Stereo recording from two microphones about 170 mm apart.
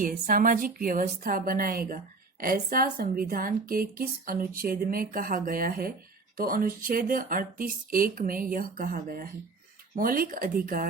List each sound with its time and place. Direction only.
0.0 s a woman's voice: 55° right (ahead or behind)